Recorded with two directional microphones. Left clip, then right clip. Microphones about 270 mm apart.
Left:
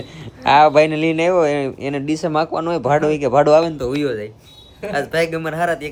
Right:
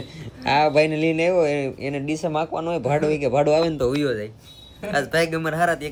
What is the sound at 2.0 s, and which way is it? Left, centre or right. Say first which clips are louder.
Speech: left 4 dB; centre.